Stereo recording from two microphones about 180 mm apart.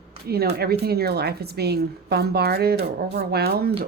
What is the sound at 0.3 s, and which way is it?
A woman's voice, 60° right (ahead or behind).